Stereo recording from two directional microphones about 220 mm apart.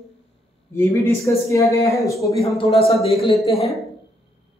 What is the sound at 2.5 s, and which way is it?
Speech, 25° left (ahead or behind).